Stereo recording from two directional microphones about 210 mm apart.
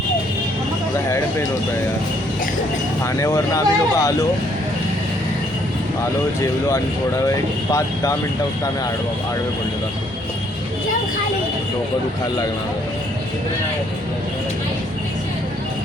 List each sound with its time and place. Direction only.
3.0 s speech: 15° left (ahead or behind)